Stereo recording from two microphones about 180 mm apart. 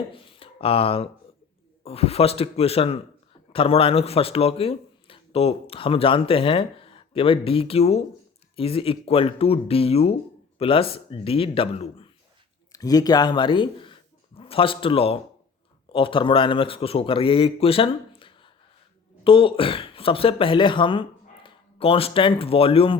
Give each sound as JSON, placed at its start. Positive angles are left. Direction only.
{"t": 0.1, "sound": "speech", "side_deg": 30}
{"t": 12.7, "sound": "a man's voice", "side_deg": 20}